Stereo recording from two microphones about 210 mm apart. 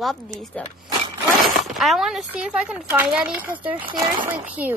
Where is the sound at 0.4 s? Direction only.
Centre (ahead or behind).